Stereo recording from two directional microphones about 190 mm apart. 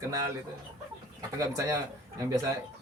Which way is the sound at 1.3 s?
15° right (ahead or behind).